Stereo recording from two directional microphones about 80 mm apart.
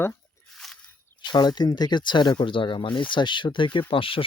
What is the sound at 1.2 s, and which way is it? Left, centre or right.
Speech, left.